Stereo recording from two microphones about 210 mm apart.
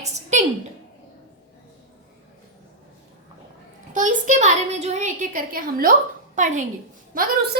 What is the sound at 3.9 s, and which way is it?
A woman's voice, 35° right (ahead or behind).